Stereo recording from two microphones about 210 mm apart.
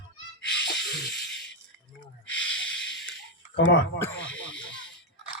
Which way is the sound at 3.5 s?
60° left (ahead or behind).